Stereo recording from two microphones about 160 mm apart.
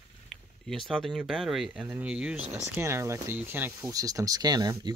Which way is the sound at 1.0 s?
Centre (ahead or behind).